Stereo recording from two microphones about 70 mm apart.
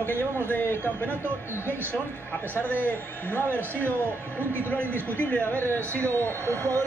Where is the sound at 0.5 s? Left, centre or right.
Left.